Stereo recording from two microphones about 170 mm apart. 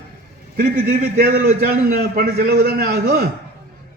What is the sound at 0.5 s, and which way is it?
A man's voice, 65° right (ahead or behind).